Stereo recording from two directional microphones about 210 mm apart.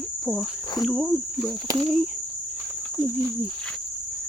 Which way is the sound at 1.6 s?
20° right (ahead or behind).